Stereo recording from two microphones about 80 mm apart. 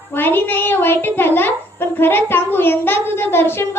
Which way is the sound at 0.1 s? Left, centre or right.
Left.